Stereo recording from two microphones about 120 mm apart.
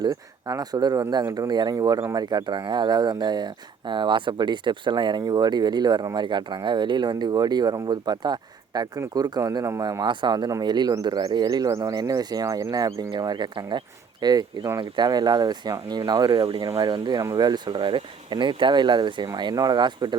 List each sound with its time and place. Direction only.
0.0 s speech: 30° right (ahead or behind)
10.0 s speech: 40° right (ahead or behind)